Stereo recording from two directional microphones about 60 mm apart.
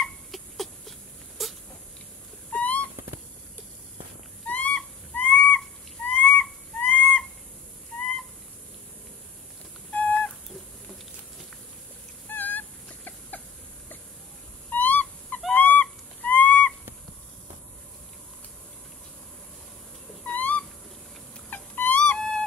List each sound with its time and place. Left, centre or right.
0.3 s dog: centre
1.4 s crying: centre
2.5 s a sound: left
4.5 s a sound: left
6.0 s owl: centre
6.3 s a sound: left
9.9 s owl: left
12.3 s dog: left
14.7 s owl: left
15.5 s goose: left
20.2 s owl: left
21.5 s a sound: left